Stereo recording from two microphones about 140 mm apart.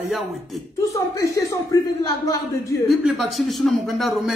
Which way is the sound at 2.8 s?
Centre (ahead or behind).